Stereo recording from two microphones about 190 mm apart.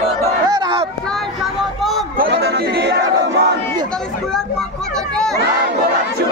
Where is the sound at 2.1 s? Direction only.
55° right (ahead or behind).